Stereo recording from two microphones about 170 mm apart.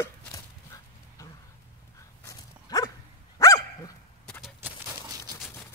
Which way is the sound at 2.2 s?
20° left (ahead or behind).